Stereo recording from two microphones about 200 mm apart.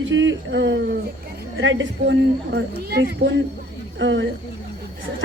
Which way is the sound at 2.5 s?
55° right (ahead or behind).